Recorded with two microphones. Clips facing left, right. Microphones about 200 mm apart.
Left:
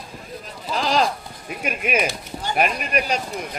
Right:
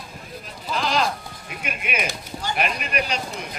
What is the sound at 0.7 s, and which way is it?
A man's voice, 35° left (ahead or behind).